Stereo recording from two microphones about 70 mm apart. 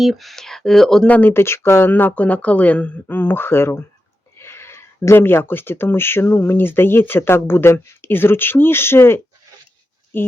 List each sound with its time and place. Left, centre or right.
0.0 s speech: centre
1.0 s speech: left
1.3 s speech: left; by 2.9 s centre
3.1 s speech: left